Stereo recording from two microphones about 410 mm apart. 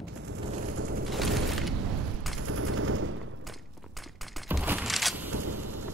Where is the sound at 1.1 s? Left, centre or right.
Centre.